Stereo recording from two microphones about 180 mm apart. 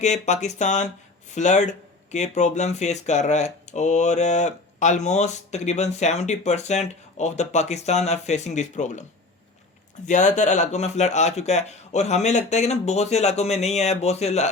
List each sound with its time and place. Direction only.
0.0 s speech: 40° left (ahead or behind)
10.1 s speech: 40° left (ahead or behind)